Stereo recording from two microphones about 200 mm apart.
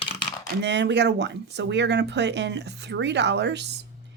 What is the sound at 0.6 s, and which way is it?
Speech, 60° right (ahead or behind).